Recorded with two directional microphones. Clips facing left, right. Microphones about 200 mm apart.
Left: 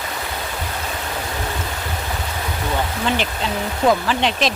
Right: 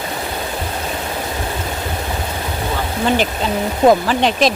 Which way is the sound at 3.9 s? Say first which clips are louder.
Right 4 dB; 40° right (ahead or behind).